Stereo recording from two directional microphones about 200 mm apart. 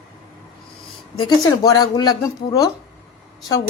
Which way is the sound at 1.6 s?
20° left (ahead or behind).